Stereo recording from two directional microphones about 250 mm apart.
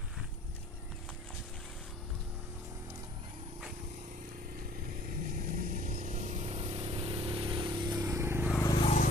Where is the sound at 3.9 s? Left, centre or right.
Right; by 8.5 s centre.